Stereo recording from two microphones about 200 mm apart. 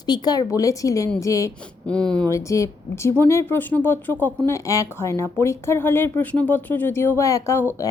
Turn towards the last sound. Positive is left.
turn(degrees=15)  # may be behind; listen again after turning